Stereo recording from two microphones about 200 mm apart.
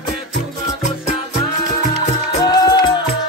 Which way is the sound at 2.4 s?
20° left (ahead or behind).